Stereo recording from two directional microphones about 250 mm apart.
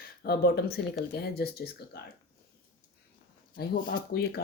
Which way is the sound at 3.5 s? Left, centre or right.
Left.